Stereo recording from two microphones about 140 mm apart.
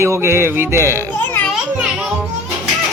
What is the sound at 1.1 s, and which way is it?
Children playing, 15° left (ahead or behind).